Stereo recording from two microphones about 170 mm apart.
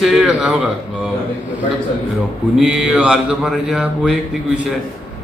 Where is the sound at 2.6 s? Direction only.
5° right (ahead or behind).